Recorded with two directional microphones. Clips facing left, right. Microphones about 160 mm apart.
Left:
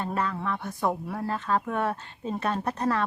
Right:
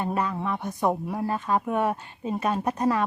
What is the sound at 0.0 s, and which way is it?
A woman's voice, 15° right (ahead or behind).